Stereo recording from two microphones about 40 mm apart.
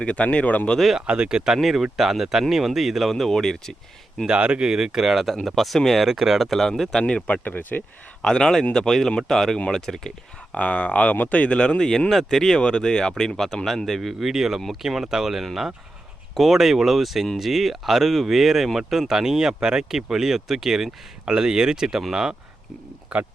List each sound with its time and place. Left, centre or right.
0.0 s speech: left
0.9 s speech: right
1.5 s speech: centre
3.1 s speech: centre
4.3 s speech: right; by 5.3 s centre
5.3 s speech: centre
6.1 s speech: centre
6.5 s speech: centre
7.4 s speech: left
8.2 s speech: centre
10.5 s speech: left; by 14.1 s centre
14.1 s speech: centre; by 23.3 s right